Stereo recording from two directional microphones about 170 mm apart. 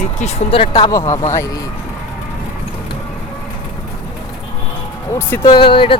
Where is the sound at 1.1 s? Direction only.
15° left (ahead or behind).